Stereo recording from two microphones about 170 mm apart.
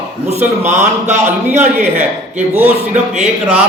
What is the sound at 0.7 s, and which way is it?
Speech, 45° right (ahead or behind).